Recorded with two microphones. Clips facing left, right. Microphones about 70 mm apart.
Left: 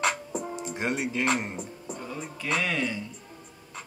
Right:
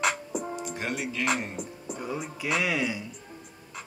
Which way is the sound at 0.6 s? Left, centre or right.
Left.